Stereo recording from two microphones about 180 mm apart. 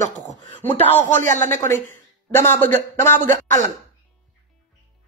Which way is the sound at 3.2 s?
45° right (ahead or behind).